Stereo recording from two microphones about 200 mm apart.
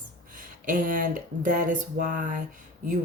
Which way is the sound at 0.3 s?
40° right (ahead or behind).